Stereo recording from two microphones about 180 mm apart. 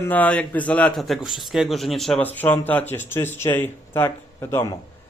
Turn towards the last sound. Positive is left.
turn(degrees=15)  # may be behind; listen again after turning